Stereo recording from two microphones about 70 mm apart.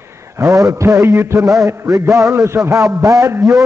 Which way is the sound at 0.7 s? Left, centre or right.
Right.